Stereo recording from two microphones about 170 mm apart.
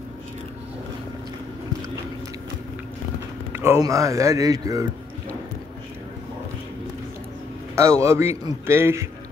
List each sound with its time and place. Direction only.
3.5 s speech: 15° right (ahead or behind)
7.7 s a man's voice: 15° right (ahead or behind)